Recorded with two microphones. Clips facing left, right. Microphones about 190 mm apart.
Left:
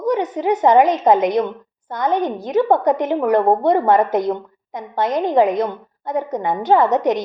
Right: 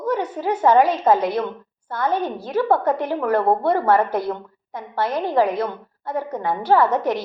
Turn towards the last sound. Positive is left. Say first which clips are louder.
# left 3 dB
turn(degrees=20)  # may be behind; listen again after turning